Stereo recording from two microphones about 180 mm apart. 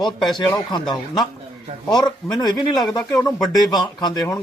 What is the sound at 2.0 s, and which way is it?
Speech, 20° left (ahead or behind).